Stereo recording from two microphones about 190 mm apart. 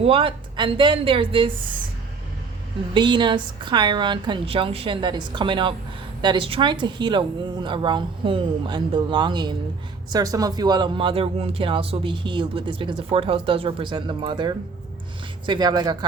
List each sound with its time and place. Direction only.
0.0 s a man's voice: 30° right (ahead or behind)
2.9 s a man's voice: 25° right (ahead or behind)